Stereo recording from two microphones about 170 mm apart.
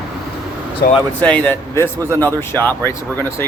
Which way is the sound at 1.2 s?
10° left (ahead or behind).